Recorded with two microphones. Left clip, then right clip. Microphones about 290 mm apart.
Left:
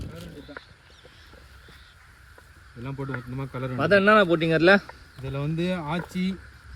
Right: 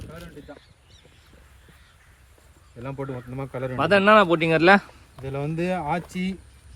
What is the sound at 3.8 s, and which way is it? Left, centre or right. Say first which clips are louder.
Speech: right 1 dB; centre.